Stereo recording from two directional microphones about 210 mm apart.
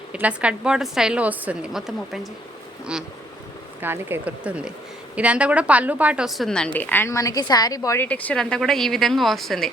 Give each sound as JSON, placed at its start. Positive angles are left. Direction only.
{"t": 0.1, "sound": "a woman's voice", "side_deg": -5}
{"t": 3.8, "sound": "a woman's voice", "side_deg": -10}